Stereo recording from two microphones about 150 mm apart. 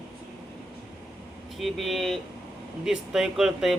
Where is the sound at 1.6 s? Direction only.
Centre (ahead or behind).